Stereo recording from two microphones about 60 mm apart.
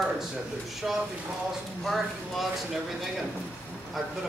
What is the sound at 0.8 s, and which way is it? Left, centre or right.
Speech, centre.